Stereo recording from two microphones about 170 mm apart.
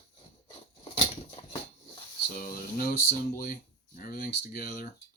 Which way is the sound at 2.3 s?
60° left (ahead or behind).